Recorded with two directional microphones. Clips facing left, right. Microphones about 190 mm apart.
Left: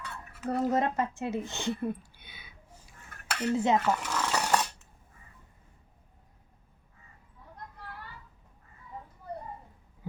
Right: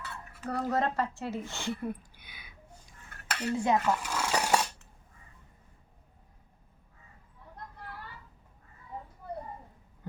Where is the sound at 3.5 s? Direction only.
20° left (ahead or behind).